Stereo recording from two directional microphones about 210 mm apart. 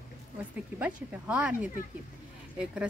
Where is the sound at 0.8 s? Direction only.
5° right (ahead or behind).